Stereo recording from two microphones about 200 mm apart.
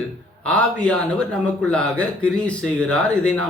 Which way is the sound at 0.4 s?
5° left (ahead or behind).